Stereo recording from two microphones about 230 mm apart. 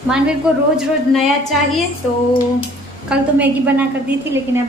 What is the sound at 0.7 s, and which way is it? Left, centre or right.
Speech, centre.